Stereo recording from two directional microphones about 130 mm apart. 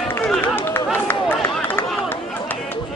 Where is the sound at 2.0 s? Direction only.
15° left (ahead or behind).